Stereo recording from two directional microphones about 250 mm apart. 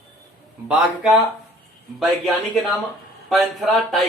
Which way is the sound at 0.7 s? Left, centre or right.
Centre.